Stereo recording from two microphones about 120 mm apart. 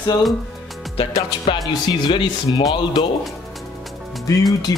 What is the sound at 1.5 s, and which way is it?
Speech, 40° left (ahead or behind).